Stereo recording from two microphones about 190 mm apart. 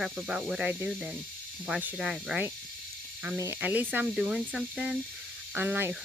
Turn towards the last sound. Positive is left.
turn(degrees=-10)  # may be behind; listen again after turning